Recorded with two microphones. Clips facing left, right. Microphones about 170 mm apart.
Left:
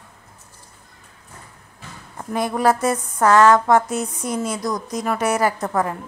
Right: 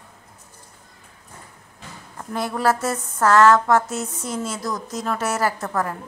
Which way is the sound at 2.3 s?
15° left (ahead or behind).